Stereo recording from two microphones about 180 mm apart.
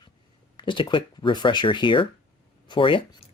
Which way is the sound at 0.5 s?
25° left (ahead or behind).